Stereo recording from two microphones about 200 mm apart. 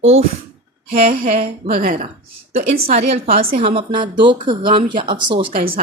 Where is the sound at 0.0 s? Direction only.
30° right (ahead or behind).